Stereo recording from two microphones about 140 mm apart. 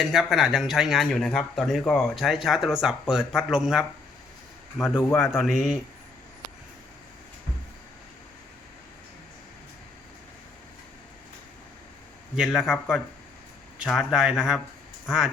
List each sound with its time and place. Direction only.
0.0 s speech: centre (ahead or behind)
4.9 s a man's voice: 15° left (ahead or behind)
5.4 s speech: centre (ahead or behind)
12.4 s speech: 5° right (ahead or behind)